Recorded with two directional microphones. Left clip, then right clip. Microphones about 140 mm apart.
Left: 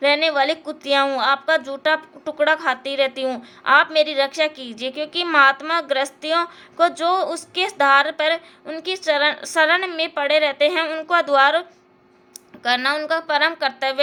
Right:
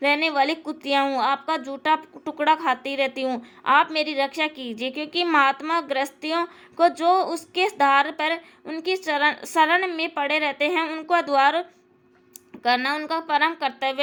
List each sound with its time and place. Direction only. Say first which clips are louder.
0.0 s a woman's voice: left 3 dB; 40° right (ahead or behind)
12.6 s a woman's voice: left 3 dB; 40° right (ahead or behind)